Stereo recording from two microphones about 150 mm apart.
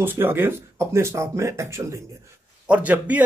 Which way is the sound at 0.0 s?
15° right (ahead or behind).